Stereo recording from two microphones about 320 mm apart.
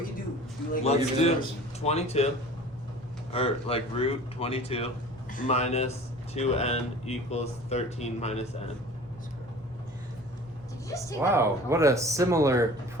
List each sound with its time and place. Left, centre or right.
0.7 s speech: centre
3.3 s speech: centre
11.2 s speech: centre